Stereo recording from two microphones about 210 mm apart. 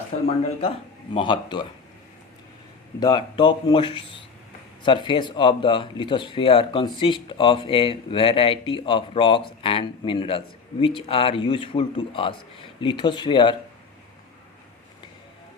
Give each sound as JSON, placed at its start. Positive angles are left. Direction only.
{"t": 0.1, "sound": "speech", "side_deg": 35}
{"t": 1.1, "sound": "speech", "side_deg": 25}
{"t": 3.0, "sound": "speech", "side_deg": 20}